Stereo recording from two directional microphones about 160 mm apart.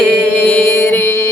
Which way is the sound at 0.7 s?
15° left (ahead or behind).